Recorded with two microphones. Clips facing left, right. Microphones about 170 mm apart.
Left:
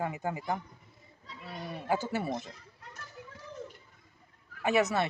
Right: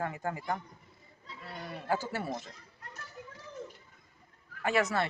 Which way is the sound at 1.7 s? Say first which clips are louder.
Left 2 dB; 20° left (ahead or behind).